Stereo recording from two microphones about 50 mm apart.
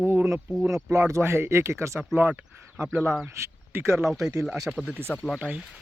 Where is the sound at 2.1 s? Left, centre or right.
Right.